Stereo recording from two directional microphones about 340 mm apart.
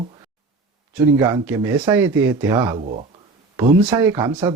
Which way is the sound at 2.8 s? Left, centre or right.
Right.